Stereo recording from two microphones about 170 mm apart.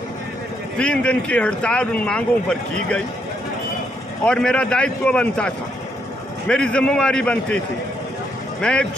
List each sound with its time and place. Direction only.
0.7 s speech: 5° left (ahead or behind)
4.2 s speech: 5° left (ahead or behind)